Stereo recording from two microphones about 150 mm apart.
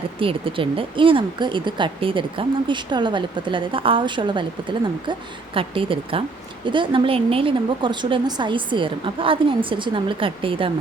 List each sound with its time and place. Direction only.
0.2 s speech: 35° right (ahead or behind)